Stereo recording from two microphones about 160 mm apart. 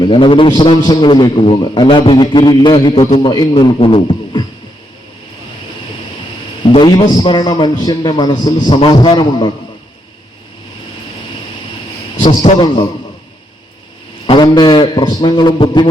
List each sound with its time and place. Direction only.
0.0 s a man's voice: 30° left (ahead or behind)
6.6 s a man's voice: 30° left (ahead or behind)
12.2 s a man's voice: 30° left (ahead or behind)
14.3 s a man's voice: 25° left (ahead or behind)